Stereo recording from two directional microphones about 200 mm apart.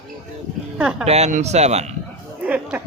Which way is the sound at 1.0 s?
35° right (ahead or behind).